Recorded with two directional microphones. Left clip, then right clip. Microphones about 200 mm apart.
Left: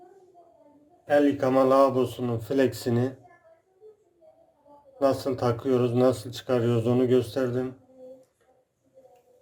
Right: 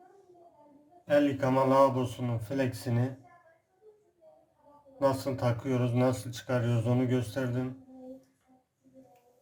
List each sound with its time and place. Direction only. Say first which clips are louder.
1.0 s speech: left 4 dB; 25° left (ahead or behind)
4.9 s speech: left 4 dB; 25° left (ahead or behind)